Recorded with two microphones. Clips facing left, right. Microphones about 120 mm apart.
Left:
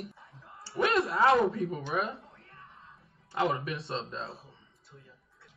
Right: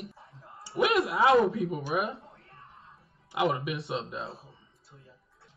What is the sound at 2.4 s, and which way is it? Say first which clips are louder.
Music: even; 30° right (ahead or behind).